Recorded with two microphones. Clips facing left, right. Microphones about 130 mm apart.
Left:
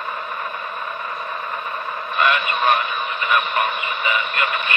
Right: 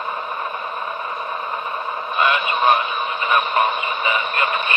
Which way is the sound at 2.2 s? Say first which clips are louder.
Right 1 dB; 20° right (ahead or behind).